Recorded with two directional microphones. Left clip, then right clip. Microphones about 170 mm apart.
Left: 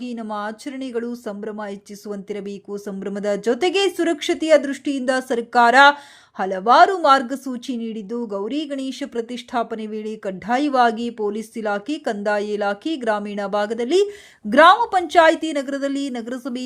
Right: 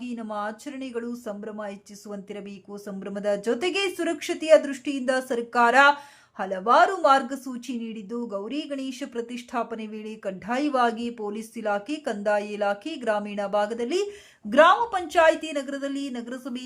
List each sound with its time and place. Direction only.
0.0 s a woman's voice: 25° left (ahead or behind)